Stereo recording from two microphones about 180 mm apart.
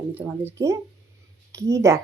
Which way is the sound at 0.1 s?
10° right (ahead or behind).